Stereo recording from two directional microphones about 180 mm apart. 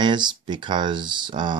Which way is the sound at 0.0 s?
25° right (ahead or behind).